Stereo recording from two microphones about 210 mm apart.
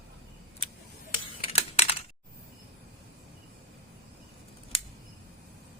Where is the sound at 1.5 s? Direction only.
30° left (ahead or behind).